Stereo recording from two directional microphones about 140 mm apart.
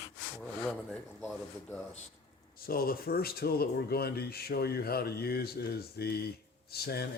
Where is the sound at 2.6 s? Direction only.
90° left.